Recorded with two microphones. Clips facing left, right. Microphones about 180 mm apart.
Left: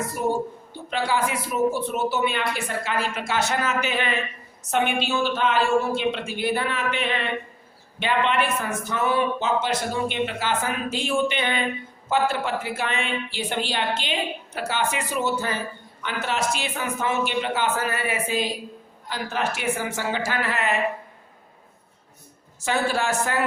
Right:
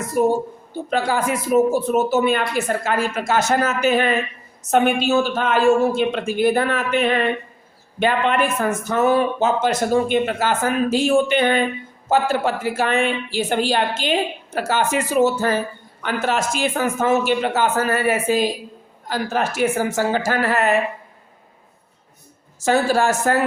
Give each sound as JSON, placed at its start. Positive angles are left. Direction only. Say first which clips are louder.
{"t": 0.2, "sound": "speech", "louder": "right 8 dB", "side_deg": -45}
{"t": 22.6, "sound": "speech", "louder": "right 7 dB", "side_deg": -40}